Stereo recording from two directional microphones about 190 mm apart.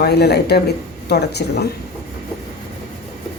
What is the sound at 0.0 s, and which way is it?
Speech, 60° left (ahead or behind).